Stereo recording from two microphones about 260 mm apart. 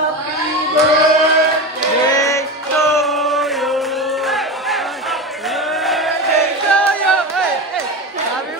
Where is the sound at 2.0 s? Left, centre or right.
Centre.